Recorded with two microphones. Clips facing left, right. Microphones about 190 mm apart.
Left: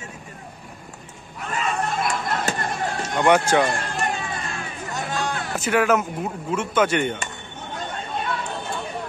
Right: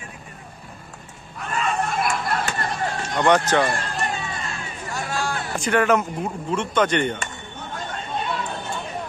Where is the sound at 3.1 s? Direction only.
10° left (ahead or behind).